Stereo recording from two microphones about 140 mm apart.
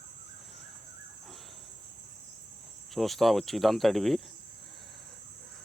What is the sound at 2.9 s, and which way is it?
Speech, centre (ahead or behind).